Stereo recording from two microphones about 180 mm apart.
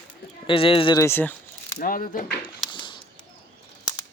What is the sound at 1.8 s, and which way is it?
Speech, 50° left (ahead or behind).